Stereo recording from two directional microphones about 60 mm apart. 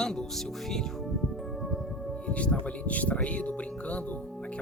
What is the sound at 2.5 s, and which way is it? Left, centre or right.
Speech, left.